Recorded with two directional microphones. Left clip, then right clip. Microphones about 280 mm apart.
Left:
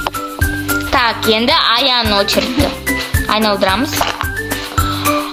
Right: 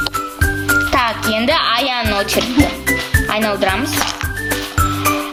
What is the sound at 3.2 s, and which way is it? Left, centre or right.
Speech, centre.